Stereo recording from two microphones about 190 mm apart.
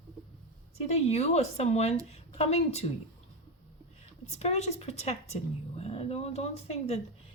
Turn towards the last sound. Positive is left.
turn(degrees=35)  # may be behind; listen again after turning